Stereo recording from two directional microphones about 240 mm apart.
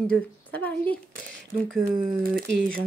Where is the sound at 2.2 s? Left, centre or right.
Right.